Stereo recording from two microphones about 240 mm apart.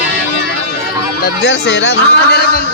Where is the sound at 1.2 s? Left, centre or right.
Left.